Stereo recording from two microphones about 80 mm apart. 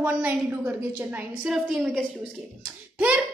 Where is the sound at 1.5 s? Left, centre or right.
Centre.